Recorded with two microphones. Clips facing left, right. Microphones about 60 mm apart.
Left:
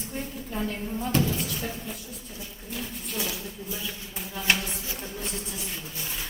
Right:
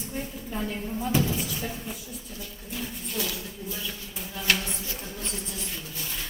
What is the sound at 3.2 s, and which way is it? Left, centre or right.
A woman's voice, centre.